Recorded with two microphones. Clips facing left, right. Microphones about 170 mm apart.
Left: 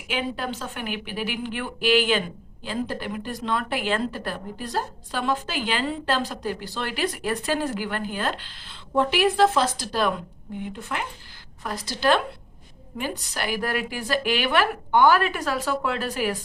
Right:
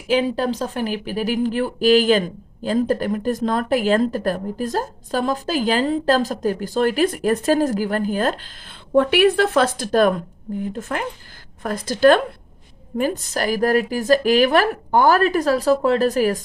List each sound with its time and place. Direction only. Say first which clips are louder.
0.1 s speech: right 9 dB; 35° right (ahead or behind)